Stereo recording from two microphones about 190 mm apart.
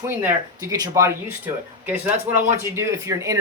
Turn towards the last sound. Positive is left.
turn(degrees=-15)  # may be behind; listen again after turning